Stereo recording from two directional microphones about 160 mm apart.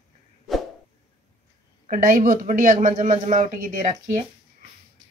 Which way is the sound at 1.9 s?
60° right (ahead or behind).